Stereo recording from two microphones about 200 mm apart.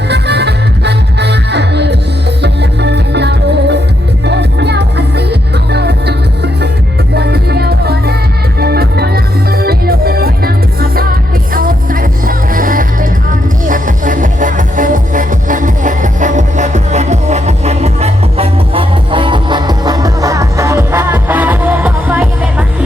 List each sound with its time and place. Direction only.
0.1 s music: 55° right (ahead or behind); by 22.6 s 10° right (ahead or behind)